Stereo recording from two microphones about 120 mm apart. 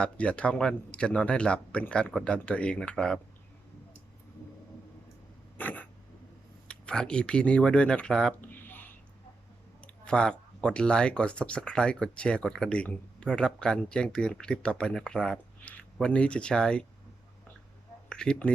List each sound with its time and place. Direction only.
0.0 s speech: 10° left (ahead or behind)
5.5 s dog: 15° left (ahead or behind)
6.7 s speech: 10° left (ahead or behind)
8.4 s a sound: 15° left (ahead or behind)
9.8 s speech: 10° left (ahead or behind)
18.1 s speech: 10° left (ahead or behind)